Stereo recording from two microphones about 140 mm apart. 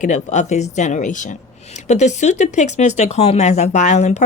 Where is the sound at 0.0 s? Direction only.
60° left (ahead or behind).